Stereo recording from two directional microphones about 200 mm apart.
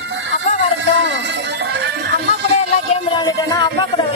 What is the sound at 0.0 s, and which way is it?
Music, 65° right (ahead or behind).